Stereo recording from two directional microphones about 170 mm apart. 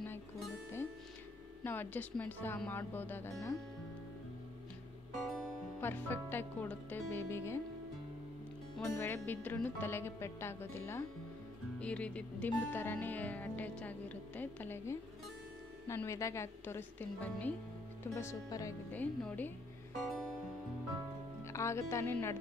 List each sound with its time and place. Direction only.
1.6 s speech: 10° left (ahead or behind)
5.2 s music: centre (ahead or behind)
5.8 s speech: 10° left (ahead or behind)
8.8 s speech: 15° left (ahead or behind)
20.1 s music: centre (ahead or behind)
21.5 s speech: 15° left (ahead or behind)